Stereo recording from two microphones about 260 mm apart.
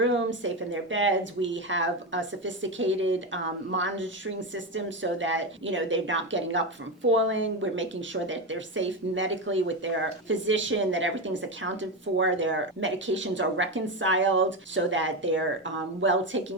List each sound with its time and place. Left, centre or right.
0.0 s speech: right